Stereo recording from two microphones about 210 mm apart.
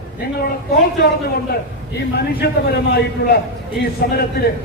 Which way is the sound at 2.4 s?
50° left (ahead or behind).